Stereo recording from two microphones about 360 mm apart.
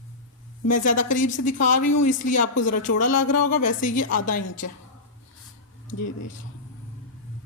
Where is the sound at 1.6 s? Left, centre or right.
Left.